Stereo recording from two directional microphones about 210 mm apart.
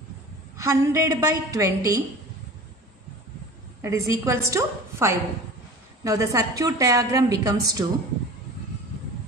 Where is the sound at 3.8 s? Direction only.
15° right (ahead or behind).